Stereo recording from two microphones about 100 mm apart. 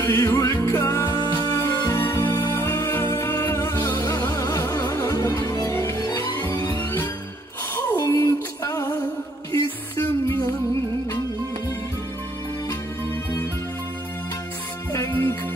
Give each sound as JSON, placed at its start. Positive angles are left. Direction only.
{"t": 0.0, "sound": "music", "side_deg": 25}
{"t": 1.4, "sound": "music", "side_deg": 40}
{"t": 7.7, "sound": "music", "side_deg": 30}
{"t": 14.9, "sound": "music", "side_deg": 25}